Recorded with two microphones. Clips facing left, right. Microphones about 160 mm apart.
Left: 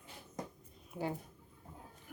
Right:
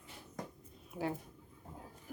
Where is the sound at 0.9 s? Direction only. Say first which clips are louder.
Right 1 dB; centre (ahead or behind).